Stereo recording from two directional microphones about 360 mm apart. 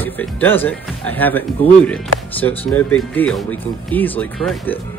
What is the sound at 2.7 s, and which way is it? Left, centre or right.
Speech, centre.